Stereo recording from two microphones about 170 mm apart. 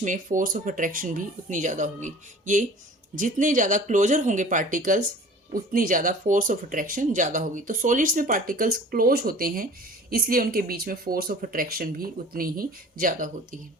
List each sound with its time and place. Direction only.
0.0 s speech: 50° right (ahead or behind)